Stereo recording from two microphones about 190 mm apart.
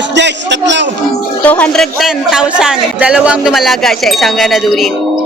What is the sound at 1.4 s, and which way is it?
Speech, 5° left (ahead or behind).